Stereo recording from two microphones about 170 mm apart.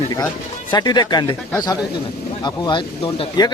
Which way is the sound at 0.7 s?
25° left (ahead or behind).